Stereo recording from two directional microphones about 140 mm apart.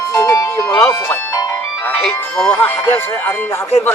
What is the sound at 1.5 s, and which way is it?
Speech, 10° left (ahead or behind).